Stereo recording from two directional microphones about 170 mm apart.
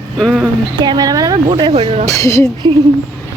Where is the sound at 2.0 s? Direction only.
20° left (ahead or behind).